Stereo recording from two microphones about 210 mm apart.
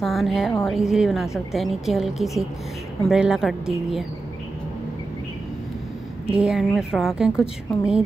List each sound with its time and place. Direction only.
0.0 s speech: centre (ahead or behind)
6.3 s speech: 5° right (ahead or behind)